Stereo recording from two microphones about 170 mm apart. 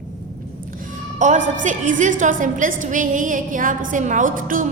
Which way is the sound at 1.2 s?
45° right (ahead or behind).